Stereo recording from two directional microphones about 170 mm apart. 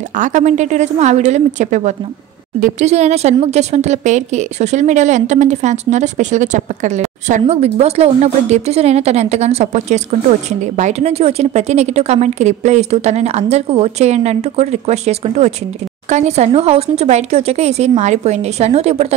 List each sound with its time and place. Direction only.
0.1 s a woman's voice: 45° right (ahead or behind)